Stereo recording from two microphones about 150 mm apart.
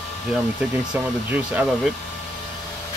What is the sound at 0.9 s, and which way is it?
Speech, 10° right (ahead or behind).